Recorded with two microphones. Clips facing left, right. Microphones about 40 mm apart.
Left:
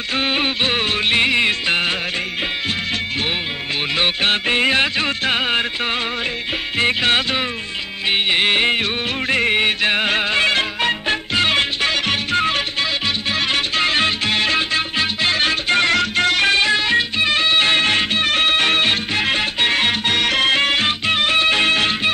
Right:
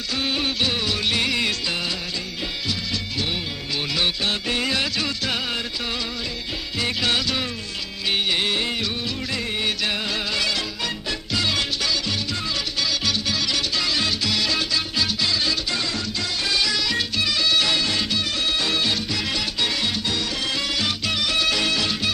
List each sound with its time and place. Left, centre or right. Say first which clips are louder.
0.2 s music: left 4 dB; left
4.0 s music: left 7 dB; left
6.8 s music: left 6 dB; left